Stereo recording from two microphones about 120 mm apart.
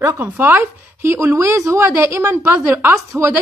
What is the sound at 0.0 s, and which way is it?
Speech, 25° right (ahead or behind).